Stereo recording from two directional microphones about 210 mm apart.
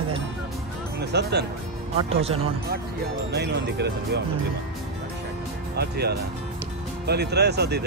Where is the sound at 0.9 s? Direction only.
50° right (ahead or behind).